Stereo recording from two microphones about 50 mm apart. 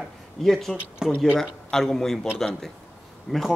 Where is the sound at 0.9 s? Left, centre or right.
Centre.